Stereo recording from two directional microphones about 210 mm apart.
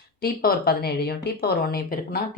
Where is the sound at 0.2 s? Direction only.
45° left (ahead or behind).